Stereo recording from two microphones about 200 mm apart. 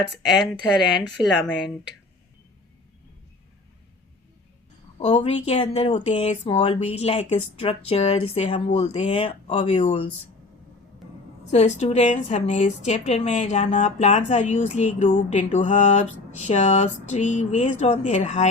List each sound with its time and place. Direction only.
0.3 s speech: centre (ahead or behind)
4.9 s a woman's voice: 35° left (ahead or behind)
11.5 s a woman's voice: 35° left (ahead or behind)